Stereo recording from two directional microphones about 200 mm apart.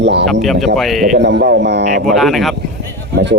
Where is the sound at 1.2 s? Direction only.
60° right (ahead or behind).